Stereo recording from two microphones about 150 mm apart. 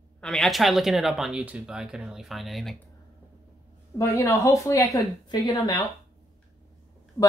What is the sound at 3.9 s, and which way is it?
A woman's voice, 20° left (ahead or behind).